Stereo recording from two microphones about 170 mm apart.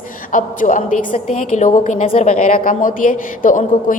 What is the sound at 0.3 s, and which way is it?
A man's voice, 50° left (ahead or behind).